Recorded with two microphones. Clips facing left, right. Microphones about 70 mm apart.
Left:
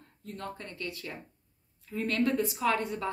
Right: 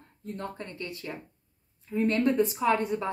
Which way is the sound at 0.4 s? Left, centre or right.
Right.